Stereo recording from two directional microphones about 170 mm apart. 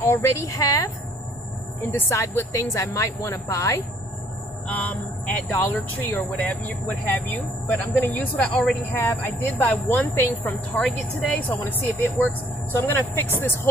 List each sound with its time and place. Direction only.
0.0 s a woman's voice: 15° left (ahead or behind)
1.9 s speech: 15° left (ahead or behind)